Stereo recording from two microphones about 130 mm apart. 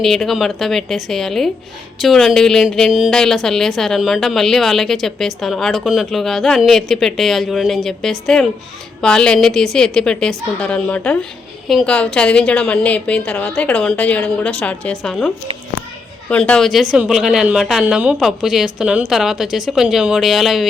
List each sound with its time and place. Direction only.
0.0 s a woman's voice: centre (ahead or behind)
16.3 s a woman's voice: 5° left (ahead or behind)